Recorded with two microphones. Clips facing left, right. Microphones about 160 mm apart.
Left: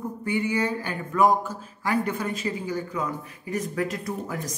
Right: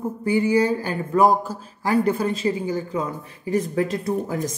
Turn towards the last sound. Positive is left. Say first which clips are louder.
# right 7 dB
turn(degrees=-25)  # may be behind; listen again after turning